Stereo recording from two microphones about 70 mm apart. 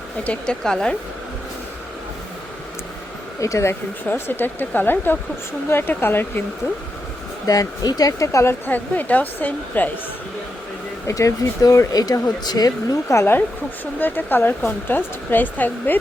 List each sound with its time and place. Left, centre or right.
0.3 s speech: centre
3.4 s speech: left
4.1 s speech: left
7.4 s speech: left
8.6 s speech: left
11.0 s speech: left
13.1 s speech: left
14.0 s speech: left